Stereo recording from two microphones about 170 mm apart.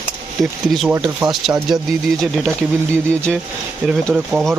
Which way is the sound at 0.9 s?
15° right (ahead or behind).